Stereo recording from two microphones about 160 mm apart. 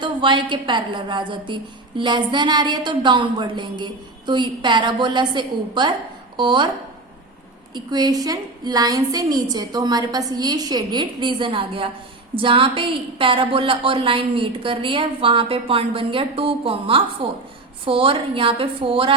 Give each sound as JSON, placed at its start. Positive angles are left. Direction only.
{"t": 0.0, "sound": "a woman's voice", "side_deg": -30}
{"t": 7.7, "sound": "a woman's voice", "side_deg": -25}